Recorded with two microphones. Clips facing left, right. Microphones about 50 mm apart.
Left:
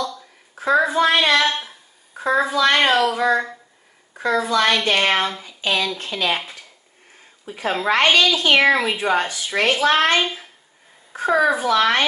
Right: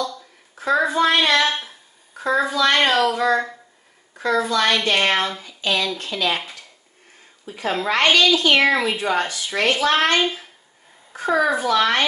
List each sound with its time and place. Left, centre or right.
0.6 s a sound: centre
2.2 s speech: centre
5.6 s speech: left
7.4 s speech: centre